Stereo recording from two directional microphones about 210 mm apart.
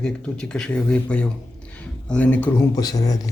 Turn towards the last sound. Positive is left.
turn(degrees=15)  # may be behind; listen again after turning